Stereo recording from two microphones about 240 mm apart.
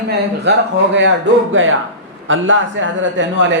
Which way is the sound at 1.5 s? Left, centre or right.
Right.